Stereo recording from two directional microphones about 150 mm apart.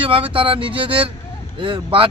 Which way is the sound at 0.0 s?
35° right (ahead or behind).